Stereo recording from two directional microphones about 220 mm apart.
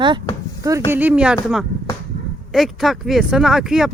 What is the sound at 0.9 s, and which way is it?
Speech, 10° right (ahead or behind).